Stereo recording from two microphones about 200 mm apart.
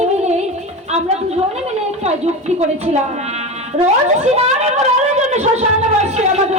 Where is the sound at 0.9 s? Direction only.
30° right (ahead or behind).